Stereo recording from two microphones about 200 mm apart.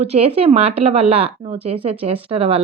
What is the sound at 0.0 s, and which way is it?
A woman's voice, 30° right (ahead or behind).